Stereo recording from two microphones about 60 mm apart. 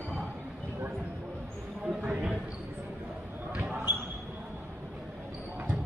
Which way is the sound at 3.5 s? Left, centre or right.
Right.